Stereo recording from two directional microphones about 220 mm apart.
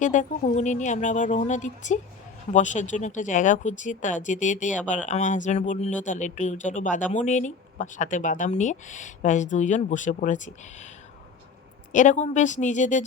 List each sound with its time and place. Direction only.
0.0 s speech: 35° left (ahead or behind)
11.9 s speech: 35° left (ahead or behind)